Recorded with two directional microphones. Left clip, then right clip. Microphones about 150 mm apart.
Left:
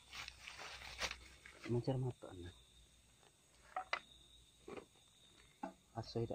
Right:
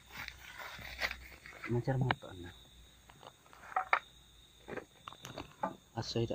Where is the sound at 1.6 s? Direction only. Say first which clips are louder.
Right 4 dB; 60° left (ahead or behind).